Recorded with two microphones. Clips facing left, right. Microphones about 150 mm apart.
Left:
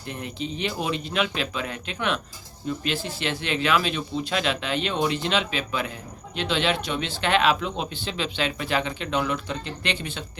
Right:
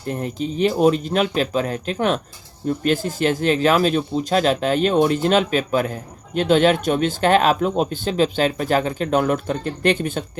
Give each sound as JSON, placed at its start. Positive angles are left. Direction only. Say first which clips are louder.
{"t": 0.0, "sound": "speech", "louder": "right 7 dB", "side_deg": -40}